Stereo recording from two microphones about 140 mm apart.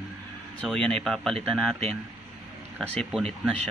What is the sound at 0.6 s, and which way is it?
Speech, 5° left (ahead or behind).